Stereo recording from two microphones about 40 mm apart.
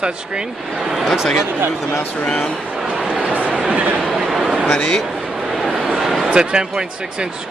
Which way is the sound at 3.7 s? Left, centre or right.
Right.